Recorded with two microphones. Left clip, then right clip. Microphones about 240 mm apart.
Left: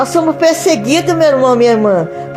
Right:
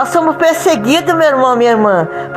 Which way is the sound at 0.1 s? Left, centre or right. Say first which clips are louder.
Even; centre.